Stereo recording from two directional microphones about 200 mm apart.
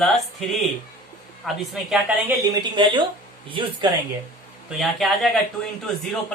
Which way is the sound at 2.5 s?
20° right (ahead or behind).